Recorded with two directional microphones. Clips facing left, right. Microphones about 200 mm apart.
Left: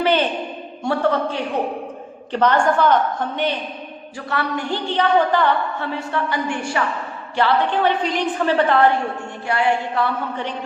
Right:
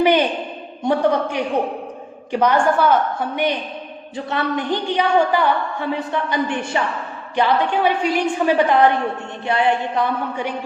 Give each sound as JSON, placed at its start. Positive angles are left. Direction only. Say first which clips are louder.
{"t": 0.0, "sound": "a woman's voice", "louder": "right 3 dB", "side_deg": -15}